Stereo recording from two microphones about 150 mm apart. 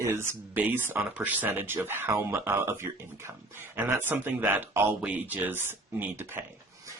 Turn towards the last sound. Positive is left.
turn(degrees=-15)  # may be behind; listen again after turning